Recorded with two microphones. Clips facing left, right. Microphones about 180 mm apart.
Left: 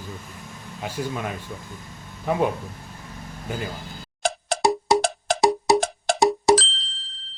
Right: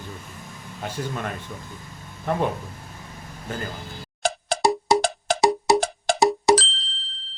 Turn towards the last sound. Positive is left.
turn(degrees=0)  # may be behind; listen again after turning